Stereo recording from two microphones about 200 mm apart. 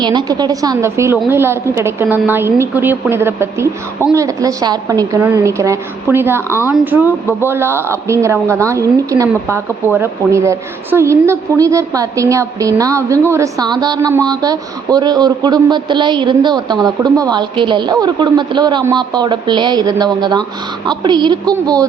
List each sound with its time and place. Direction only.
0.0 s a woman's voice: 20° right (ahead or behind)